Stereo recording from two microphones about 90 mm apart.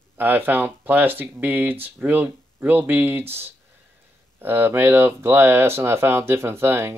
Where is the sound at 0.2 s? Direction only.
20° right (ahead or behind).